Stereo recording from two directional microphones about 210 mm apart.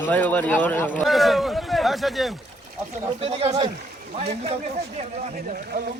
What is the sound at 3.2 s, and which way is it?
Speech, 25° right (ahead or behind).